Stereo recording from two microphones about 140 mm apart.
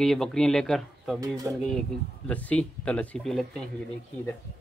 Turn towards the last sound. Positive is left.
turn(degrees=0)  # may be behind; listen again after turning